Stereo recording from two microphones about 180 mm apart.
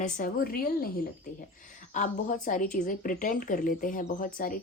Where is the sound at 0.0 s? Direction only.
50° left (ahead or behind).